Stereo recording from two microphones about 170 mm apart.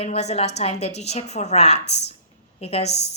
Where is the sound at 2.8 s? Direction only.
80° left.